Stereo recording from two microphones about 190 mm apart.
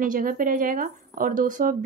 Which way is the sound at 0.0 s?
45° right (ahead or behind).